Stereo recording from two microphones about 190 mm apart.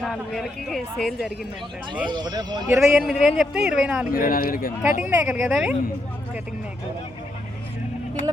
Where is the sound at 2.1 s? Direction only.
20° right (ahead or behind).